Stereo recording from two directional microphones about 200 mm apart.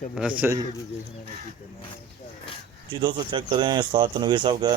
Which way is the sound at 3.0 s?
20° right (ahead or behind).